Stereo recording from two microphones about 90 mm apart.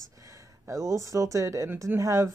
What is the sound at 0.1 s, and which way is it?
A woman's voice, 40° right (ahead or behind).